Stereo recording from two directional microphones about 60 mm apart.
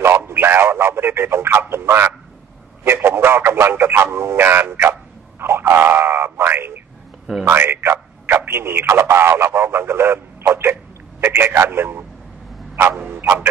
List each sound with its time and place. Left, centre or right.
0.3 s a man's voice: right
7.7 s speech: right